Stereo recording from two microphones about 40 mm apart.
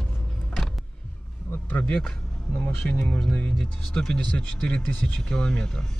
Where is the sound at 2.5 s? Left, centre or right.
Left; by 5.9 s centre.